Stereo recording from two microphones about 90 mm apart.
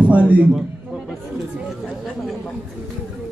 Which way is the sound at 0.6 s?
5° right (ahead or behind).